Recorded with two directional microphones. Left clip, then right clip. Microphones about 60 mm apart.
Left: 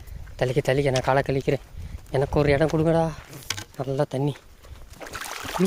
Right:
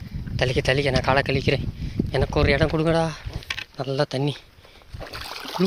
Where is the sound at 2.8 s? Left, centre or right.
Left.